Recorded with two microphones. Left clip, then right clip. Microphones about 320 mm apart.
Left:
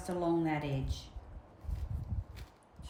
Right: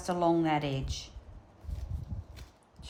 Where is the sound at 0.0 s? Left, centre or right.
Centre.